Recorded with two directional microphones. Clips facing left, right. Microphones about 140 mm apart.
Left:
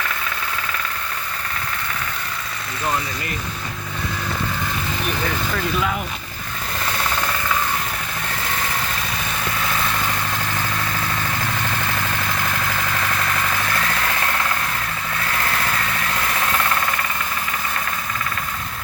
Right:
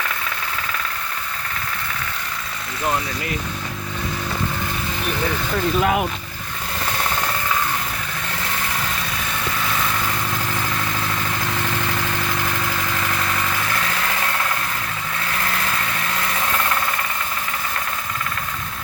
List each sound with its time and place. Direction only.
5.8 s speech: 65° right (ahead or behind)